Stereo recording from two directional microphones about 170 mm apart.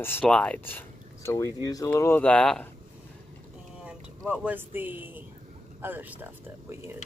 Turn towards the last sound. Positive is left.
turn(degrees=-10)  # may be behind; listen again after turning